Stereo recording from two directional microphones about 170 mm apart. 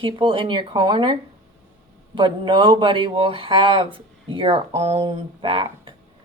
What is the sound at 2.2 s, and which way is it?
Speech, 30° right (ahead or behind).